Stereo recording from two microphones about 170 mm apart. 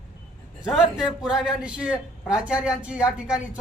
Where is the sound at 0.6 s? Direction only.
Centre (ahead or behind).